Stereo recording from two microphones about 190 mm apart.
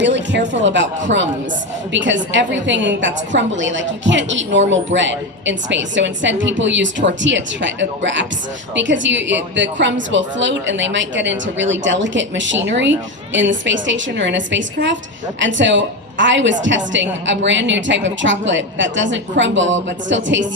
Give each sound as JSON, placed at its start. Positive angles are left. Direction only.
{"t": 0.0, "sound": "a woman's voice", "side_deg": -70}